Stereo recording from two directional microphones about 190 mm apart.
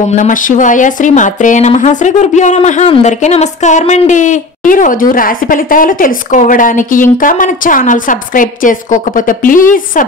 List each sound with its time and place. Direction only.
0.1 s speech: 40° left (ahead or behind)